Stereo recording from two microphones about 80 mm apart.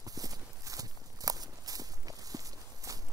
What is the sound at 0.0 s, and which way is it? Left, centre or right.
Walk, right.